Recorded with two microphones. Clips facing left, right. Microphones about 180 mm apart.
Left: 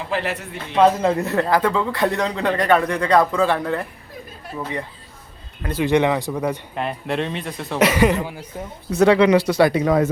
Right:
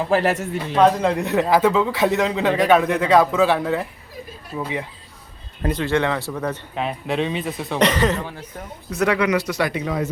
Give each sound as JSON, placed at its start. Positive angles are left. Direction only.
{"t": 0.1, "sound": "a man's voice", "side_deg": -45}
{"t": 0.8, "sound": "a man's voice", "side_deg": 5}
{"t": 5.7, "sound": "speech", "side_deg": 15}
{"t": 6.7, "sound": "a man's voice", "side_deg": 0}
{"t": 8.9, "sound": "speech", "side_deg": 30}